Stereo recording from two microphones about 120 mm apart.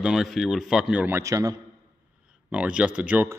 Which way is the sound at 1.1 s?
25° right (ahead or behind).